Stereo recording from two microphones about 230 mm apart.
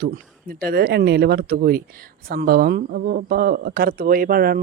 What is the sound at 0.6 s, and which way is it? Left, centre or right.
Speech, right.